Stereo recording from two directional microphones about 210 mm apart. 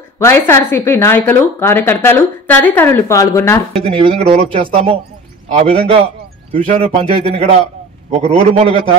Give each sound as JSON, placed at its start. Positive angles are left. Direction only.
{"t": 0.2, "sound": "a woman's voice", "side_deg": 10}
{"t": 3.7, "sound": "speech", "side_deg": -30}